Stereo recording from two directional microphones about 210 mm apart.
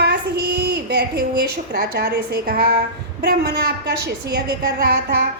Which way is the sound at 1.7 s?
45° right (ahead or behind).